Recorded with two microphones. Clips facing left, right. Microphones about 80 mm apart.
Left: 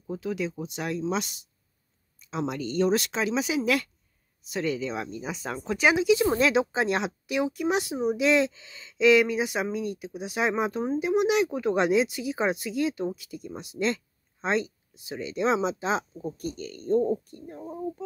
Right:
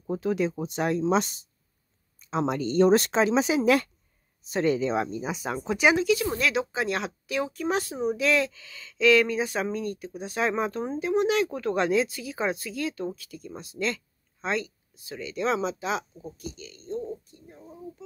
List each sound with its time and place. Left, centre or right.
0.0 s speech: right; by 5.9 s centre
6.1 s speech: left
16.3 s speech: left